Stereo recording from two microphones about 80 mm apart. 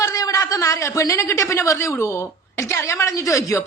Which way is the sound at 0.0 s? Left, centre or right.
Left.